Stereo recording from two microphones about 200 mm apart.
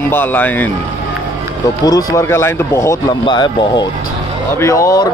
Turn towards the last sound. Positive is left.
turn(degrees=15)  # may be behind; listen again after turning